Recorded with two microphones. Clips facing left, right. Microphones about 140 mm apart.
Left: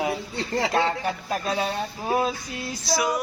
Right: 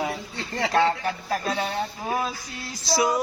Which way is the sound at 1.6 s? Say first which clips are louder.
Even; 25° left (ahead or behind).